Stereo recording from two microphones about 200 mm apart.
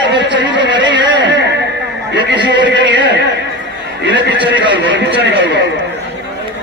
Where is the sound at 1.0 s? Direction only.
60° right (ahead or behind).